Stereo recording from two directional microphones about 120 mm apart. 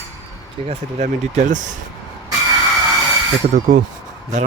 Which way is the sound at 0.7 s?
70° right (ahead or behind).